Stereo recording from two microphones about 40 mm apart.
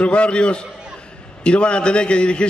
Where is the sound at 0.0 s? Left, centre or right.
Left.